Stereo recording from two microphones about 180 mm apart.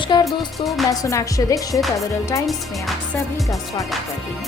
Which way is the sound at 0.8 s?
20° left (ahead or behind).